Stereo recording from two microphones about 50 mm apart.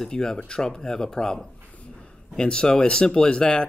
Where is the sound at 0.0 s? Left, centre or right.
Centre.